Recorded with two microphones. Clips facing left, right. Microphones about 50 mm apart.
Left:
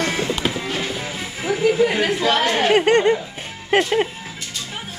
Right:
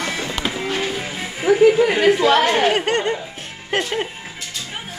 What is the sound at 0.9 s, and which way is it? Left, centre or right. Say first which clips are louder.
Music: right 1 dB; right.